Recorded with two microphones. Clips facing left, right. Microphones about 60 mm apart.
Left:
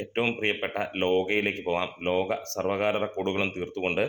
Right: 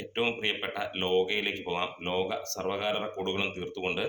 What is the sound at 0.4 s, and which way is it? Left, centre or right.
Speech, left.